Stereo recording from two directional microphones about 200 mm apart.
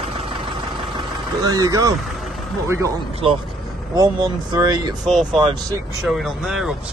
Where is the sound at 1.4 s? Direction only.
20° right (ahead or behind).